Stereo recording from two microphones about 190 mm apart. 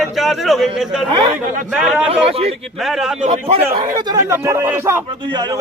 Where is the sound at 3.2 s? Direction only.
35° right (ahead or behind).